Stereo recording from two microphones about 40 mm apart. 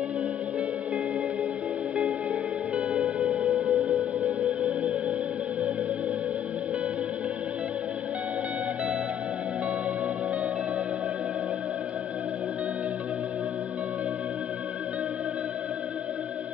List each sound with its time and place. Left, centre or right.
3.6 s music: centre
4.2 s music: right